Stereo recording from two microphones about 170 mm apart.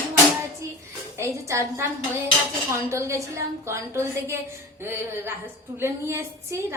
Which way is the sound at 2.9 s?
15° right (ahead or behind).